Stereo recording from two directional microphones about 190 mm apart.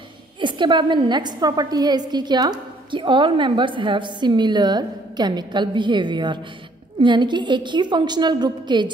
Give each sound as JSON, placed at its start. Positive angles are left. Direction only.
{"t": 0.4, "sound": "a woman's voice", "side_deg": -25}